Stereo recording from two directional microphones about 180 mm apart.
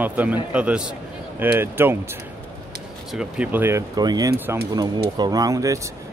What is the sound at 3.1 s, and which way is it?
A man's voice, 5° right (ahead or behind).